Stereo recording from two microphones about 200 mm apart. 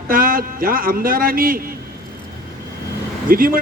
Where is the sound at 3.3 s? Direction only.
45° right (ahead or behind).